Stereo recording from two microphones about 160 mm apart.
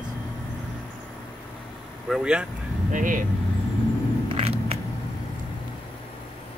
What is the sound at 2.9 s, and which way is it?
Speech, 55° right (ahead or behind).